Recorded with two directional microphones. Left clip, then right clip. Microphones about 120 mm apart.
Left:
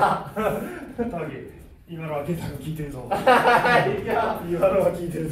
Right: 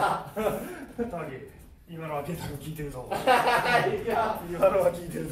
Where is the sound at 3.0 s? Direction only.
25° left (ahead or behind).